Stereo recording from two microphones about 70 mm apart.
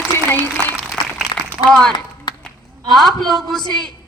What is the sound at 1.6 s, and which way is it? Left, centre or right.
Speech, centre.